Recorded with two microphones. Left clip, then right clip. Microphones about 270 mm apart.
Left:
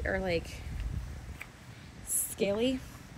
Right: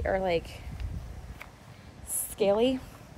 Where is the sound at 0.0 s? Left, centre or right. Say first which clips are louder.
Right 4 dB; centre.